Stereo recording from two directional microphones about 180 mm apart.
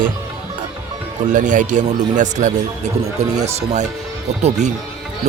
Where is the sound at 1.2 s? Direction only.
45° right (ahead or behind).